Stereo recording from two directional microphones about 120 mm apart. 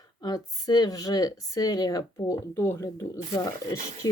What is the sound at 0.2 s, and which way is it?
Speech, 35° left (ahead or behind).